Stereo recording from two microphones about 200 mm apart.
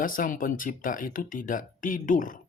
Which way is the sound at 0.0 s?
45° left (ahead or behind).